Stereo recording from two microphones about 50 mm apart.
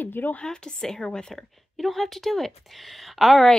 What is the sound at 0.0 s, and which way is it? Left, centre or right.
Speech, left.